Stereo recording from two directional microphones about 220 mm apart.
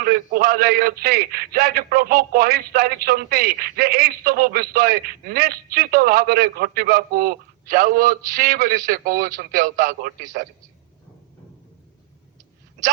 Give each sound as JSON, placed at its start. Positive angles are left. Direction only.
{"t": 0.0, "sound": "a man's voice", "side_deg": -45}